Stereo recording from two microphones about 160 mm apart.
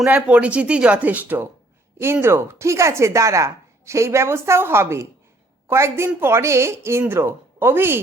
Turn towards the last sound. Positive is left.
turn(degrees=-15)  # may be behind; listen again after turning